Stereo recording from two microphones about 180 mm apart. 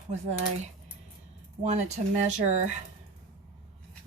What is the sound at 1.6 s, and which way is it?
Speech, 40° right (ahead or behind).